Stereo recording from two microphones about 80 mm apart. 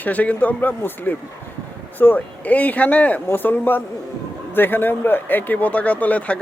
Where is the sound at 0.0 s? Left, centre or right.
Centre.